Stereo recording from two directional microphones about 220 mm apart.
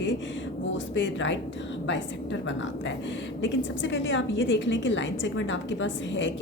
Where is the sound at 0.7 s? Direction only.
55° left (ahead or behind).